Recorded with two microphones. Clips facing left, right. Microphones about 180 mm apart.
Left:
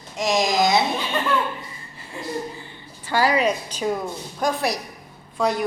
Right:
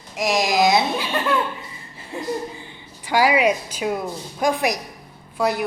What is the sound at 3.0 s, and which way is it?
A woman's voice, 15° right (ahead or behind).